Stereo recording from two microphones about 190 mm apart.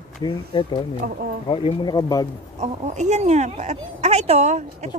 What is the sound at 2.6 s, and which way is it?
Speech, 40° right (ahead or behind).